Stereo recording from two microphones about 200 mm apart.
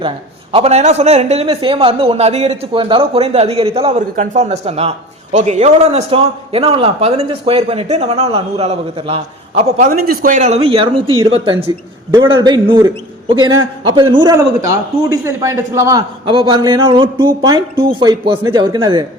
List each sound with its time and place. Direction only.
0.5 s a man's voice: 30° right (ahead or behind)